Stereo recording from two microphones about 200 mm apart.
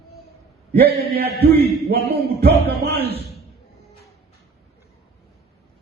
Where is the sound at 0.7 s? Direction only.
50° right (ahead or behind).